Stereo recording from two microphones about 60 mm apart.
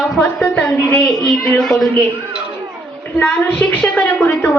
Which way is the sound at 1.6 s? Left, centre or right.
Centre.